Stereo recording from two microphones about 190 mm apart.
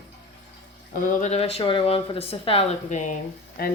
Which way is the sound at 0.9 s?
45° left (ahead or behind).